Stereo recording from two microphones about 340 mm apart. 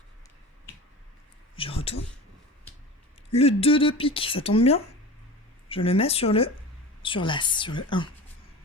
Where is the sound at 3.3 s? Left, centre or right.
Centre.